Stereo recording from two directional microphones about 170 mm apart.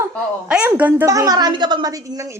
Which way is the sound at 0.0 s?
10° right (ahead or behind).